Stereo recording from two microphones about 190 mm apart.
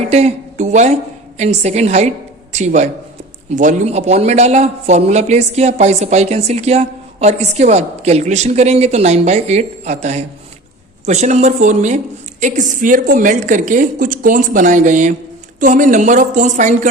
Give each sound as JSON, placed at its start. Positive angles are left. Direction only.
{"t": 0.1, "sound": "a woman's voice", "side_deg": -35}